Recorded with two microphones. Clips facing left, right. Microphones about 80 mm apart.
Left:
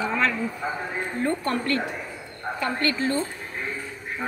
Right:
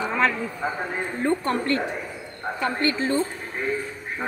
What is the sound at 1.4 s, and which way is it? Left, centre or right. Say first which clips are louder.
A woman's voice: right 2 dB; right.